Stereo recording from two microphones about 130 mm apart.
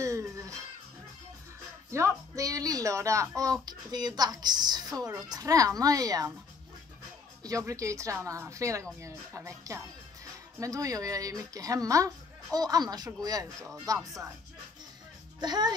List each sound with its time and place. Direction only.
0.0 s music: 25° right (ahead or behind)
1.9 s speech: 20° right (ahead or behind)
7.4 s speech: 25° right (ahead or behind)
15.4 s speech: 35° right (ahead or behind)